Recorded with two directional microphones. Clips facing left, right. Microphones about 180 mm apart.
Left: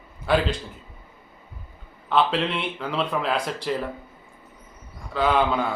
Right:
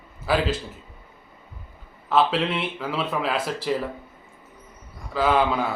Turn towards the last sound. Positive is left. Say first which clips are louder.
# even
turn(degrees=0)  # may be behind; listen again after turning